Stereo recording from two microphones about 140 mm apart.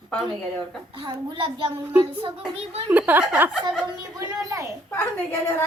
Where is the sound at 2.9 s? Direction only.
10° right (ahead or behind).